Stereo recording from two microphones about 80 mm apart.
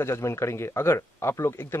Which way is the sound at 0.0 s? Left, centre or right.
Left.